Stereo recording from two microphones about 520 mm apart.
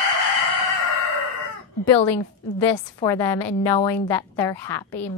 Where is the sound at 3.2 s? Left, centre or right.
Left.